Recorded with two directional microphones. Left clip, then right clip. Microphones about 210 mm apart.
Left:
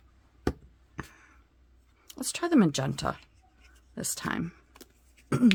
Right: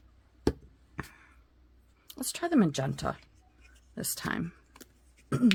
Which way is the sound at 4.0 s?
15° left (ahead or behind).